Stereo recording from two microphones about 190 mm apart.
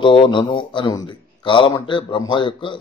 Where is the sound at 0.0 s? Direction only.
25° left (ahead or behind).